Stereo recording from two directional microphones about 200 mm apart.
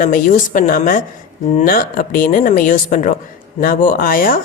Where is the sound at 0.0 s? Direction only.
40° left (ahead or behind).